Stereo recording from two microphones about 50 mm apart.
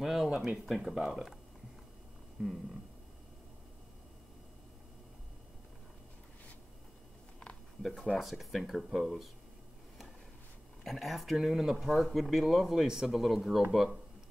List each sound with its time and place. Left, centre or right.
0.0 s speech: centre
2.4 s a sound: right
8.2 s speech: centre
10.8 s speech: centre